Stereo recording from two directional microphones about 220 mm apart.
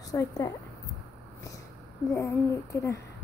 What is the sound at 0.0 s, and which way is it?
Speech, 15° left (ahead or behind).